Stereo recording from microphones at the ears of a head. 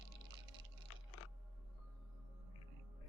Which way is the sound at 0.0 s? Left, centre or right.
Right.